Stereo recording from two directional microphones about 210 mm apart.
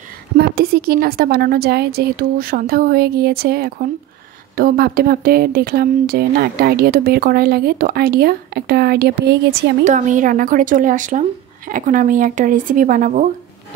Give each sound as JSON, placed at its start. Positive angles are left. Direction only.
{"t": 0.4, "sound": "speech", "side_deg": -45}
{"t": 9.8, "sound": "speech", "side_deg": -35}